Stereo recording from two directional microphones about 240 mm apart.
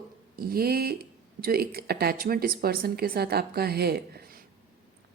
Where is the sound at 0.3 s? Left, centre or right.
Right.